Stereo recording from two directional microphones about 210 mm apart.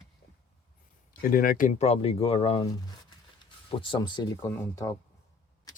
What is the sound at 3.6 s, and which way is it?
Speech, 25° left (ahead or behind).